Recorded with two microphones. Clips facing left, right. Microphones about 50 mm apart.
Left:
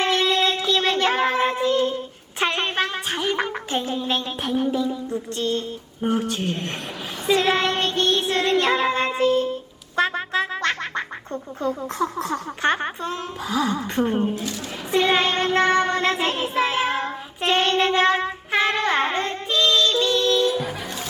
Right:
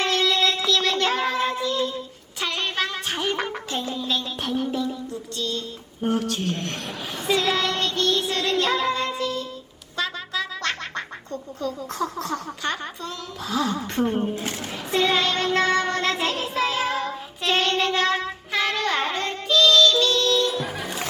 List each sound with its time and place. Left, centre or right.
0.0 s a sound: left
0.9 s child singing: left
3.1 s a sound: centre
3.3 s music: centre
3.8 s speech: left
4.4 s a sound: centre
5.0 s speech: left
7.3 s child singing: left
10.6 s quack: left
11.6 s speech: left
13.4 s speech: centre
14.3 s a woman's voice: right
14.8 s child singing: left